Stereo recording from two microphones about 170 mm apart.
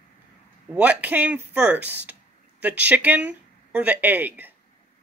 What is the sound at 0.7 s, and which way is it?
Speech, 10° right (ahead or behind).